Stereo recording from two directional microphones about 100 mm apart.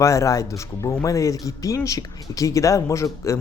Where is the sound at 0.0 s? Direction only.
30° left (ahead or behind).